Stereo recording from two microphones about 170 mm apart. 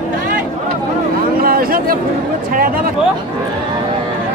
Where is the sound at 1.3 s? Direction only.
60° right (ahead or behind).